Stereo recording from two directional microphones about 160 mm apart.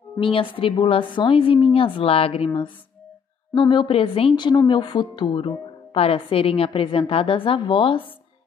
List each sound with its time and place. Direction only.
0.2 s a woman's voice: 35° left (ahead or behind)